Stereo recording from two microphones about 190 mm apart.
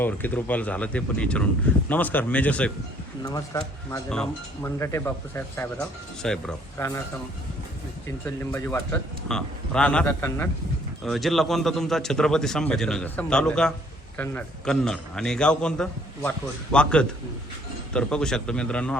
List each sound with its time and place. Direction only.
0.0 s a man's voice: 10° left (ahead or behind)
3.2 s a man's voice: 20° left (ahead or behind)
4.1 s a man's voice: 5° left (ahead or behind)
6.7 s a man's voice: 15° left (ahead or behind)
8.5 s a man's voice: 10° left (ahead or behind)
11.0 s a man's voice: centre (ahead or behind)